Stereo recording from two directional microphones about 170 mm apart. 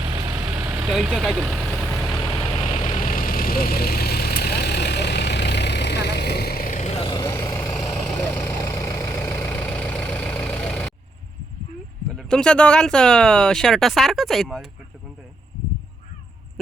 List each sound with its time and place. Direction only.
0.0 s vehicle: 25° right (ahead or behind)
0.9 s vehicle: centre (ahead or behind)
2.3 s vehicle: 30° left (ahead or behind)
3.0 s vehicle: 55° left (ahead or behind)
7.1 s vehicle: 15° left (ahead or behind)
8.3 s vehicle: 5° left (ahead or behind)
8.7 s vehicle: 20° left (ahead or behind)
12.1 s speech: 5° left (ahead or behind)